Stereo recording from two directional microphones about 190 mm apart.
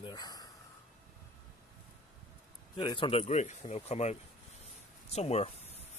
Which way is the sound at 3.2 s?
40° left (ahead or behind).